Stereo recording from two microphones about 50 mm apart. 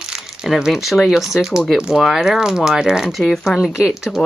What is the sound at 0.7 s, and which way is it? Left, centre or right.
Speech, centre.